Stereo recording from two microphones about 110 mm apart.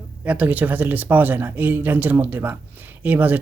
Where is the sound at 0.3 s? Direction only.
15° right (ahead or behind).